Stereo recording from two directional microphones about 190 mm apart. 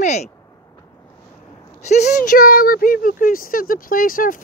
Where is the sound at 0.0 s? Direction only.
35° left (ahead or behind).